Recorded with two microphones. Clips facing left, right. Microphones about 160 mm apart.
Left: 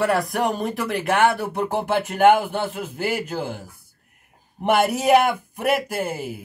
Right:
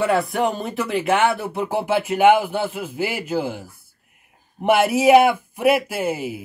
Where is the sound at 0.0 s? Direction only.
Centre (ahead or behind).